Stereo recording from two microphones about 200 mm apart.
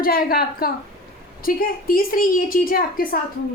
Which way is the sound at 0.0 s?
50° left (ahead or behind).